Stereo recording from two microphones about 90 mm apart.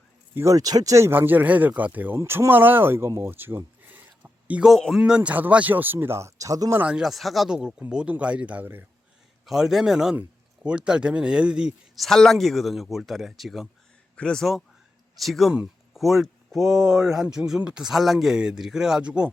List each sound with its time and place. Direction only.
0.3 s speech: 35° right (ahead or behind); by 4.7 s 15° right (ahead or behind)
4.7 s speech: centre (ahead or behind)
5.0 s speech: 10° right (ahead or behind); by 6.7 s 40° right (ahead or behind)
6.7 s speech: 10° right (ahead or behind)
9.5 s speech: 5° right (ahead or behind)
11.9 s speech: 5° left (ahead or behind)